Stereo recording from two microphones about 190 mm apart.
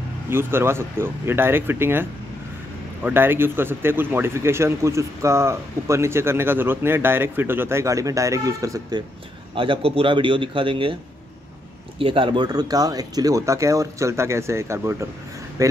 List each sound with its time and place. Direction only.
0.3 s speech: 10° right (ahead or behind)
9.6 s a man's voice: 30° right (ahead or behind)
12.0 s speech: 25° right (ahead or behind)